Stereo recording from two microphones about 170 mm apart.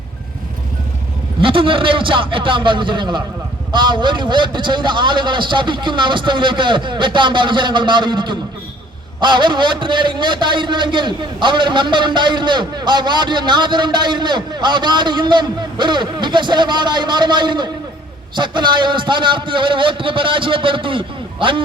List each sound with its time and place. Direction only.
1.4 s a man's voice: 30° right (ahead or behind)